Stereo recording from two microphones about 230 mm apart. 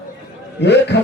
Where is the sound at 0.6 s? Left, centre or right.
Left.